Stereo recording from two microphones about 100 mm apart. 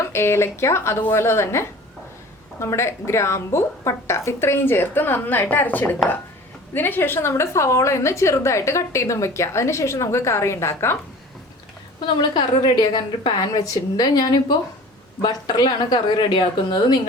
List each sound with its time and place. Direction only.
0.0 s a woman's voice: 25° left (ahead or behind)
12.0 s a woman's voice: 50° left (ahead or behind)